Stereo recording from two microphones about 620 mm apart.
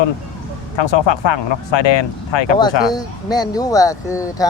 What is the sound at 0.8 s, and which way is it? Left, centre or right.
Speech, left.